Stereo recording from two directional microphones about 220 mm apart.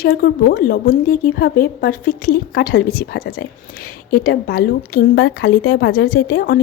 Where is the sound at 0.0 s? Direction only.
45° left (ahead or behind).